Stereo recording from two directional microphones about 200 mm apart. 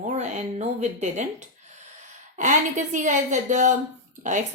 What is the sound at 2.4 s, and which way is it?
A woman's voice, 40° right (ahead or behind).